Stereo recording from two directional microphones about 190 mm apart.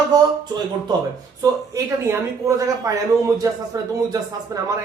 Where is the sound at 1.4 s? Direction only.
15° right (ahead or behind).